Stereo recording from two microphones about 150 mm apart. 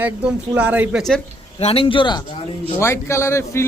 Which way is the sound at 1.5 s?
40° left (ahead or behind).